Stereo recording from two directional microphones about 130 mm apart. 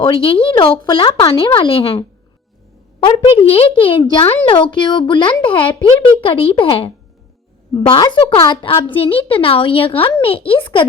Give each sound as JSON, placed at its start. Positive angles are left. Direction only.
{"t": 0.0, "sound": "speech", "side_deg": 40}
{"t": 3.3, "sound": "a woman's voice", "side_deg": 45}